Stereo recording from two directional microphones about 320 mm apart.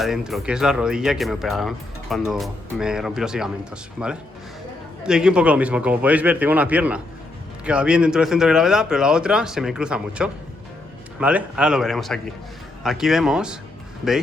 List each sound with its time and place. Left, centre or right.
0.0 s speech: centre